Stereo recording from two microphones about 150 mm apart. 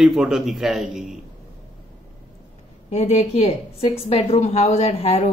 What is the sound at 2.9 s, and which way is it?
A woman's voice, 45° left (ahead or behind).